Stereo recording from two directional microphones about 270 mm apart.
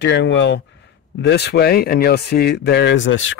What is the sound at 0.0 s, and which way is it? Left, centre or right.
Speech, left.